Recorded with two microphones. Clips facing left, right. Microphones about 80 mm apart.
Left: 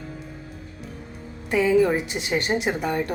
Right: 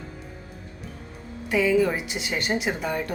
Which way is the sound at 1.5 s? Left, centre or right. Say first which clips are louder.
Left 1 dB; left.